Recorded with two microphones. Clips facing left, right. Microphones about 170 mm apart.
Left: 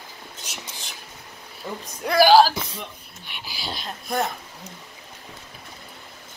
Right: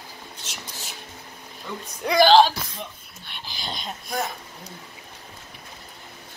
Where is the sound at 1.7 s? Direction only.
40° left (ahead or behind).